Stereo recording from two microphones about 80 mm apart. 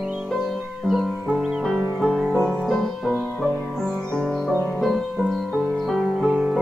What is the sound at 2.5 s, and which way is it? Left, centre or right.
Music, centre.